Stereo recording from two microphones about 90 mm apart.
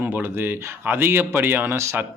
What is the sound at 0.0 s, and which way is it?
Speech, 25° right (ahead or behind).